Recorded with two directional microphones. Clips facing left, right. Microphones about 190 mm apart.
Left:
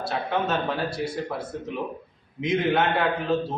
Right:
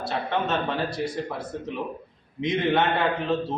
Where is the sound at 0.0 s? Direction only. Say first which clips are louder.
Even; centre (ahead or behind).